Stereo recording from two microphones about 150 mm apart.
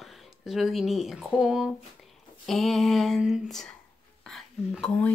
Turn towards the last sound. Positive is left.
turn(degrees=5)  # may be behind; listen again after turning